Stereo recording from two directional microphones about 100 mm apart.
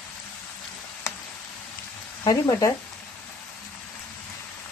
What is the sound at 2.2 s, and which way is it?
Speech, 35° left (ahead or behind).